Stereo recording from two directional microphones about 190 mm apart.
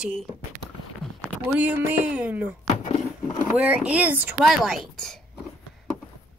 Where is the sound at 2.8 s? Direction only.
35° left (ahead or behind).